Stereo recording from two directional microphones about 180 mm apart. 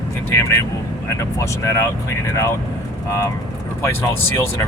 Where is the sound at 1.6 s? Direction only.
15° left (ahead or behind).